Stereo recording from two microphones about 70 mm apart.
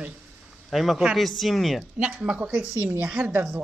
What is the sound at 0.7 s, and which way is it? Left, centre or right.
Speech, centre.